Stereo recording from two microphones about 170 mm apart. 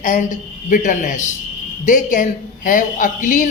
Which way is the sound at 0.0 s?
50° left (ahead or behind).